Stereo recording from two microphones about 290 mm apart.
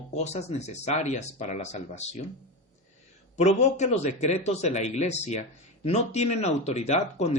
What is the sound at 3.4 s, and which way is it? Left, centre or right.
Speech, left.